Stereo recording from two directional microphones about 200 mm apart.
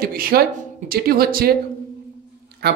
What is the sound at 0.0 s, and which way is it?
Speech, 45° right (ahead or behind).